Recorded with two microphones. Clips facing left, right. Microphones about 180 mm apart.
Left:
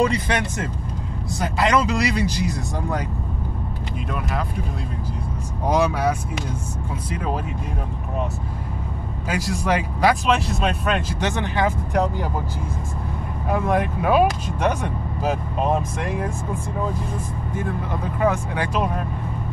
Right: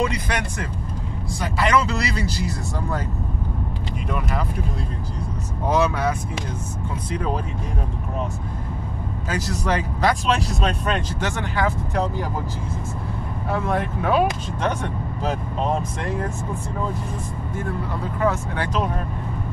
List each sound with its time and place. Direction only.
0.0 s speech: 25° left (ahead or behind)
4.1 s speech: centre (ahead or behind)
5.7 s speech: 15° left (ahead or behind)
9.3 s speech: 10° left (ahead or behind)
11.1 s speech: 20° left (ahead or behind)
13.5 s speech: 15° left (ahead or behind)
18.2 s speech: 15° left (ahead or behind)